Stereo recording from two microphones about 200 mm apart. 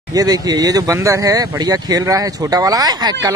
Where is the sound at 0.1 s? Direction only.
20° right (ahead or behind).